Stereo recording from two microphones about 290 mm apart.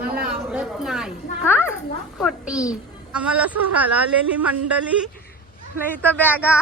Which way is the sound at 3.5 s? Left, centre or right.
Right.